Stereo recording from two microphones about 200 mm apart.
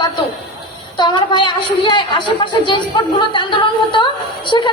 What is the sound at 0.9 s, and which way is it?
A woman's voice, 25° left (ahead or behind).